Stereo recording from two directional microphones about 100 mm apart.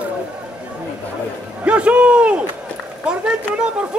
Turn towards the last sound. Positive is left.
turn(degrees=-10)  # may be behind; listen again after turning